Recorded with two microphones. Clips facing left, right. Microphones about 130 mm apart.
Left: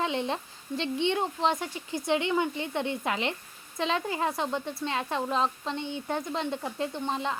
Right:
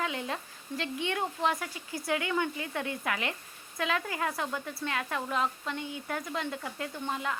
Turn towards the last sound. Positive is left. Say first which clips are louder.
# left 3 dB
turn(degrees=25)  # may be behind; listen again after turning